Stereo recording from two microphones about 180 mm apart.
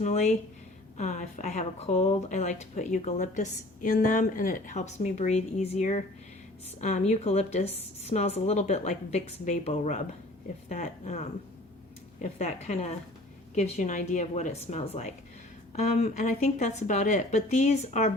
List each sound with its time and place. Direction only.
0.0 s speech: 40° left (ahead or behind)